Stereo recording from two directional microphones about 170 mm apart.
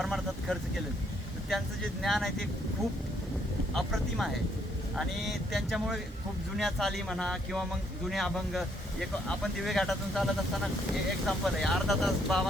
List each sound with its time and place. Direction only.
0.0 s vehicle: centre (ahead or behind)
1.5 s speech: centre (ahead or behind)
3.8 s speech: centre (ahead or behind)